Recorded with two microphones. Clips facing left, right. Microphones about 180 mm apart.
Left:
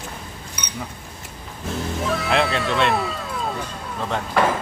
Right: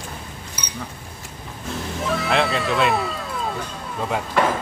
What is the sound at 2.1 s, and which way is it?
Cat, centre (ahead or behind).